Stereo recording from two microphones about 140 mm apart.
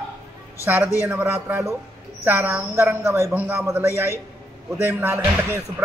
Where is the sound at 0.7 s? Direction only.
15° right (ahead or behind).